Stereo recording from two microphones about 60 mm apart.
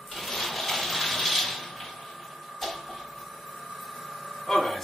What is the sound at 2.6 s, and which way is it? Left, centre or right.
Printer, centre.